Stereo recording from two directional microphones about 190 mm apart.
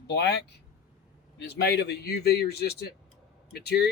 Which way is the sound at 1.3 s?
60° left (ahead or behind).